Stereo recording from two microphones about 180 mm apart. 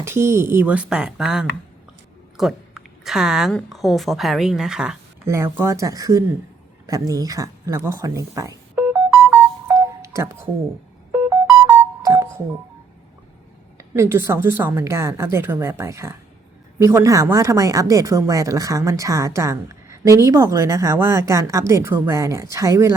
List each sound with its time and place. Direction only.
0.0 s a woman's voice: 15° right (ahead or behind)
5.3 s speech: 15° right (ahead or behind)
6.8 s a sound: 20° right (ahead or behind)
11.6 s music: 10° right (ahead or behind)
13.7 s speech: 15° right (ahead or behind)